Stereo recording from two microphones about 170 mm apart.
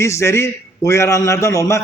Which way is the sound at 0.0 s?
15° left (ahead or behind).